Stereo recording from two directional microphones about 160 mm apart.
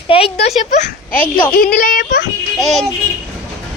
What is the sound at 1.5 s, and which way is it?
Speech, 60° left (ahead or behind).